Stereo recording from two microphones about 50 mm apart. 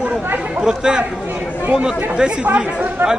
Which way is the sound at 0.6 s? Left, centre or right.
Centre.